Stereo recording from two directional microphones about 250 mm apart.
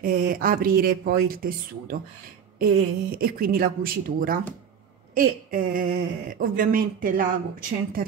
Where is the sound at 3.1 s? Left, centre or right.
Right.